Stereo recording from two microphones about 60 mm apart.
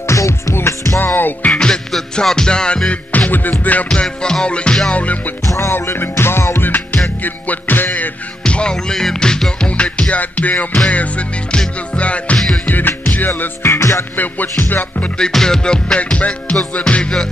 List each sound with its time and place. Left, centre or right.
0.0 s music: left
0.6 s music: left
1.0 s music: left
1.5 s music: centre
4.0 s music: centre
5.7 s music: left
8.5 s music: centre
13.4 s music: left
14.1 s music: left
15.1 s music: centre